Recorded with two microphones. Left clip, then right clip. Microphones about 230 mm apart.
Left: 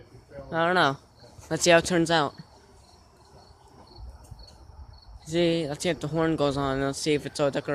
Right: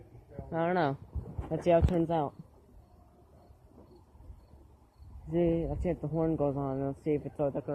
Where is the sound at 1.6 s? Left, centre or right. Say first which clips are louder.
Left 7 dB; left.